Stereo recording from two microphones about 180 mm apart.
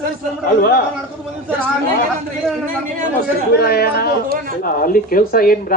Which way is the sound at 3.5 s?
60° left (ahead or behind).